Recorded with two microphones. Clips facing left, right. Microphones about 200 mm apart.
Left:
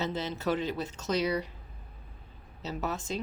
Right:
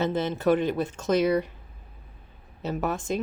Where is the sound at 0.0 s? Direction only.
55° right (ahead or behind).